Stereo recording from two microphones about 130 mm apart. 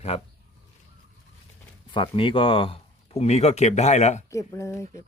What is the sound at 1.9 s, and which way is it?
Speech, 40° left (ahead or behind).